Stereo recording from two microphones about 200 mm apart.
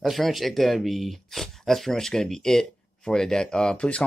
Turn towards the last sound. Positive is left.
turn(degrees=5)  # may be behind; listen again after turning